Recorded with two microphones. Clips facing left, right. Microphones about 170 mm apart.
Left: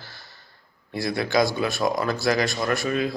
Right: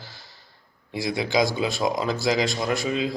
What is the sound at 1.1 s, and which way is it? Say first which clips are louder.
A man's voice: left 1 dB; 20° right (ahead or behind).